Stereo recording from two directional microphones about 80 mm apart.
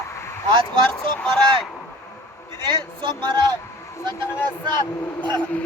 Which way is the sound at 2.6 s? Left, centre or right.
Right.